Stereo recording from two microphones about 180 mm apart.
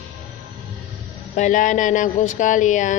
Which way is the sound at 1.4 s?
45° left (ahead or behind).